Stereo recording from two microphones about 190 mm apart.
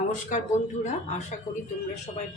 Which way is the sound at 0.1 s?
40° left (ahead or behind).